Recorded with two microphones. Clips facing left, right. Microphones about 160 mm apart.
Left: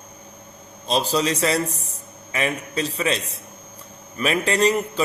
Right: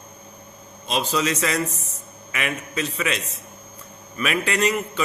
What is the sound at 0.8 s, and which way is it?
A man's voice, 35° left (ahead or behind).